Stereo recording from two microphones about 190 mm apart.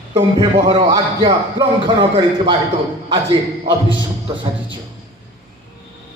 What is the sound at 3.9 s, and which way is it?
Speech, 25° right (ahead or behind).